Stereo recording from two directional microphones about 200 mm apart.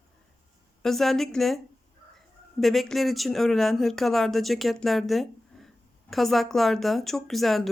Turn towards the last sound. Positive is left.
turn(degrees=0)  # may be behind; listen again after turning